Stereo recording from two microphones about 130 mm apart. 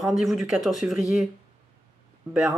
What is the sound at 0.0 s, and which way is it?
Speech, centre (ahead or behind).